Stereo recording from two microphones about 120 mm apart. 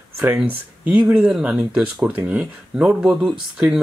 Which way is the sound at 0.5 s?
15° right (ahead or behind).